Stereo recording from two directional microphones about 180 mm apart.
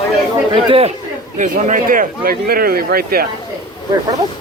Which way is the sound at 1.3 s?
45° right (ahead or behind).